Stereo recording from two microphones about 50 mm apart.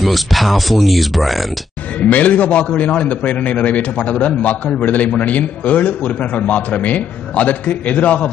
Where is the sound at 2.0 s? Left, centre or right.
Left.